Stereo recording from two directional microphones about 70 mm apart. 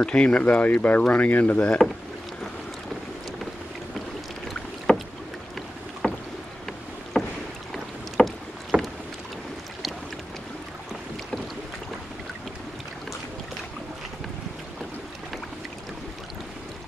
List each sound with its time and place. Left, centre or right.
0.0 s speech: centre
4.9 s rowboat: centre
6.0 s rowboat: centre
8.7 s rowboat: centre